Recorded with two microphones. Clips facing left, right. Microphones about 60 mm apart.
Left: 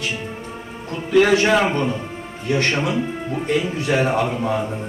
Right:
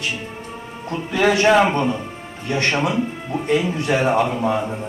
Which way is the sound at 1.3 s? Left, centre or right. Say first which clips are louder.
Right 2 dB; right.